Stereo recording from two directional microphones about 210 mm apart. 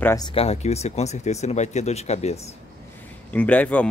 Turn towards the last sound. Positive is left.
turn(degrees=5)  # may be behind; listen again after turning